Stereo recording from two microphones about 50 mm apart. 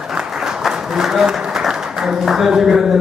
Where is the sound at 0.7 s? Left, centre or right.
Centre.